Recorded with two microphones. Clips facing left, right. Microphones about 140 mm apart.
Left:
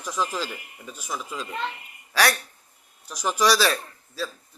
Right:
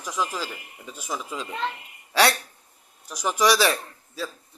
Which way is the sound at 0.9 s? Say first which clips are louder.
Right 1 dB; 20° right (ahead or behind).